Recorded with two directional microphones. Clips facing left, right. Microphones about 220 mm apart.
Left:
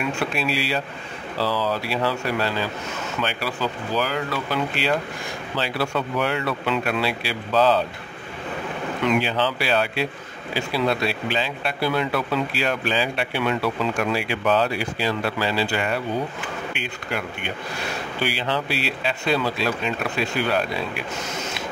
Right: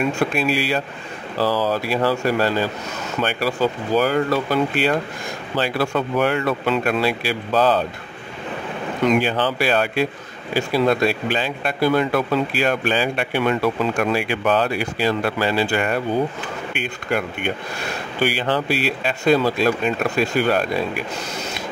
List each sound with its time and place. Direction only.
0.2 s speech: 50° right (ahead or behind)
9.0 s speech: 50° right (ahead or behind)